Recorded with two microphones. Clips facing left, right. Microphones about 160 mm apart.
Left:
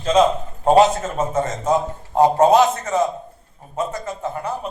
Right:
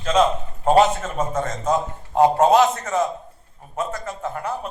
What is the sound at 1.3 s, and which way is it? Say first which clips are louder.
A man's voice: left 3 dB; 10° left (ahead or behind).